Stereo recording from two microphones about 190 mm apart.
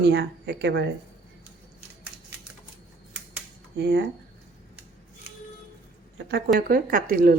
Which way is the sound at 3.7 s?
65° right (ahead or behind).